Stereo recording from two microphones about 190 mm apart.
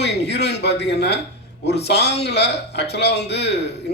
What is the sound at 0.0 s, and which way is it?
A man's voice, 65° left (ahead or behind).